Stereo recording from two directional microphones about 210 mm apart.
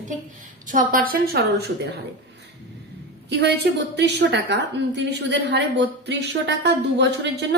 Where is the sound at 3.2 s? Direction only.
55° right (ahead or behind).